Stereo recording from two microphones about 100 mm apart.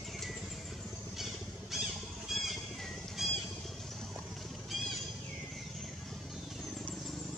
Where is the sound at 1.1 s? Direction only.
Centre (ahead or behind).